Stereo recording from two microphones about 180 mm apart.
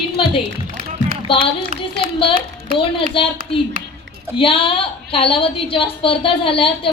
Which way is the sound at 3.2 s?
30° left (ahead or behind).